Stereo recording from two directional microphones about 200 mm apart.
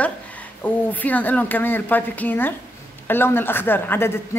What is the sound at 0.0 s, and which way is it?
A woman's voice, 5° left (ahead or behind).